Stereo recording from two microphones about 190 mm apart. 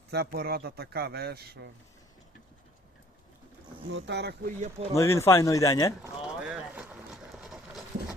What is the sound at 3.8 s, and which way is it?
Speech, 70° right (ahead or behind).